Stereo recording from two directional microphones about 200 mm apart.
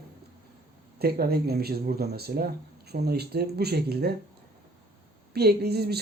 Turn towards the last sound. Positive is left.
turn(degrees=-55)  # may be behind; listen again after turning